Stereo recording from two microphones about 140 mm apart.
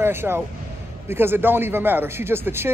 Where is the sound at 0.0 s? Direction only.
15° right (ahead or behind).